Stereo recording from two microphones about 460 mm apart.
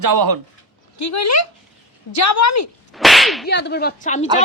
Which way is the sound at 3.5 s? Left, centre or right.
Left.